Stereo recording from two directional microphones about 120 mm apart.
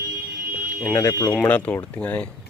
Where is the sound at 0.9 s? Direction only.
25° left (ahead or behind).